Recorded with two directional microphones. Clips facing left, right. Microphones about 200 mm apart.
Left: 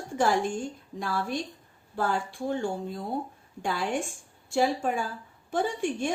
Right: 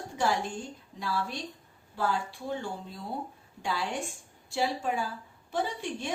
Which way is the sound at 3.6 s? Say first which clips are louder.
Left 4 dB; 50° left (ahead or behind).